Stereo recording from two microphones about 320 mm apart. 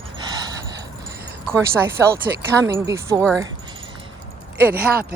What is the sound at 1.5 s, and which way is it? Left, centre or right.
Speech, centre.